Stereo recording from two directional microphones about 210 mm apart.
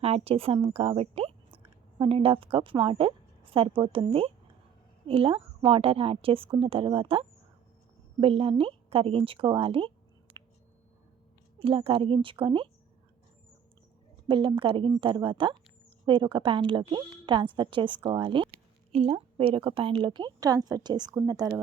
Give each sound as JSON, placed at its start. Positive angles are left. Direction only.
{"t": 0.0, "sound": "a woman's voice", "side_deg": -30}
{"t": 11.6, "sound": "a woman's voice", "side_deg": -25}
{"t": 14.3, "sound": "a woman's voice", "side_deg": -25}